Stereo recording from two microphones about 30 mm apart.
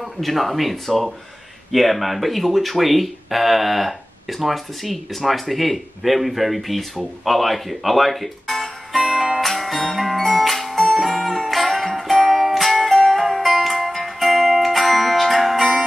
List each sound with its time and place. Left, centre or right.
0.2 s speech: centre
9.0 s music: centre
9.4 s music: centre